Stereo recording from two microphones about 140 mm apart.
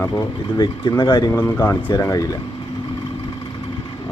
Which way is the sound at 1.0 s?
35° left (ahead or behind).